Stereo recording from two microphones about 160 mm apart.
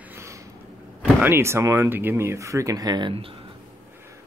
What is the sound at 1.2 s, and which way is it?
Speech, 15° right (ahead or behind).